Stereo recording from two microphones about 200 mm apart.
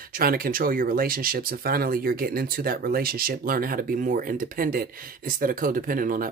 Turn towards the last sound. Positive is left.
turn(degrees=-45)  # may be behind; listen again after turning